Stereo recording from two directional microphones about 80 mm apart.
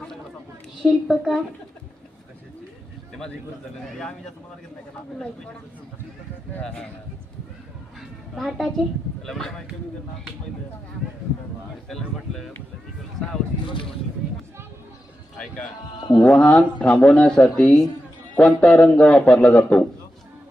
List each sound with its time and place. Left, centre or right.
0.8 s a woman's voice: centre
3.1 s a sound: centre
3.8 s a woman's voice: centre
6.6 s a man's voice: centre
8.4 s a woman's voice: centre
11.9 s a woman's voice: centre
16.0 s speech: left
16.2 s a man's voice: centre